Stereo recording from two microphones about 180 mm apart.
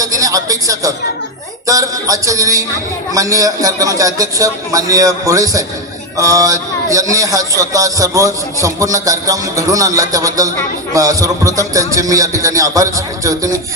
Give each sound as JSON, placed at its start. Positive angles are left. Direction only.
{"t": 0.0, "sound": "a man's voice", "side_deg": -20}